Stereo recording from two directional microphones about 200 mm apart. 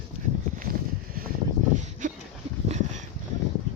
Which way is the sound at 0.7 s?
50° right (ahead or behind).